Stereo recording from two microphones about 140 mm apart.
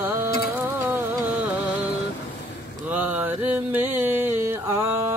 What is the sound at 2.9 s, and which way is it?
Music, 10° right (ahead or behind).